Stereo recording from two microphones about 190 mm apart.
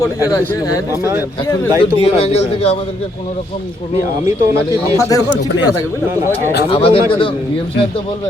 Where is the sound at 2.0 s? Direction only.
30° left (ahead or behind).